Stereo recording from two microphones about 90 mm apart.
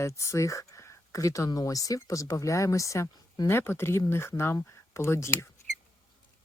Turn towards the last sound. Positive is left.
turn(degrees=30)  # may be behind; listen again after turning